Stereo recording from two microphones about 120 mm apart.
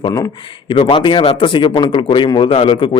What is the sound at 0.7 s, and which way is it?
Speech, 45° left (ahead or behind).